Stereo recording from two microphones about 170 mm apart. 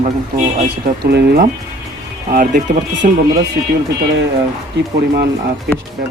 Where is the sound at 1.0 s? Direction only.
75° right (ahead or behind).